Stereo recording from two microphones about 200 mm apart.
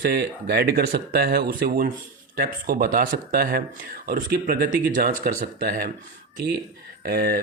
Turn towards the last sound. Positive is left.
turn(degrees=-50)  # may be behind; listen again after turning